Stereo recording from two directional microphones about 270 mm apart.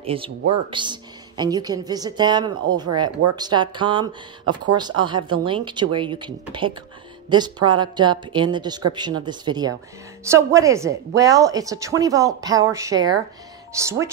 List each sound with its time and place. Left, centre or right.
0.0 s a woman's voice: right